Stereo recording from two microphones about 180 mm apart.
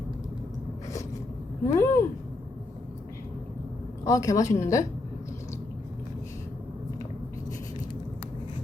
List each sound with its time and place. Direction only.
1.6 s a woman's voice: 15° left (ahead or behind)
4.0 s a woman's voice: 20° left (ahead or behind)